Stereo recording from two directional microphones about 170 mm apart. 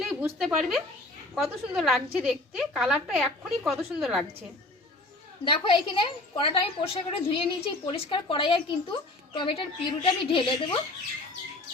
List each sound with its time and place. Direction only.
0.0 s a woman's voice: centre (ahead or behind)
5.5 s a woman's voice: 30° left (ahead or behind)